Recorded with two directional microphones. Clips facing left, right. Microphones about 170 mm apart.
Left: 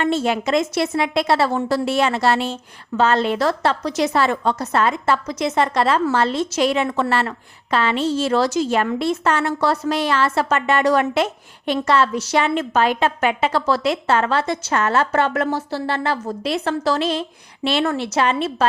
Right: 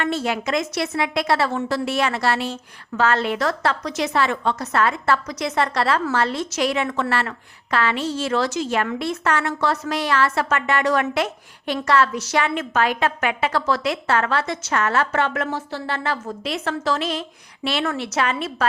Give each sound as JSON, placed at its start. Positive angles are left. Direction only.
{"t": 0.0, "sound": "a woman's voice", "side_deg": 25}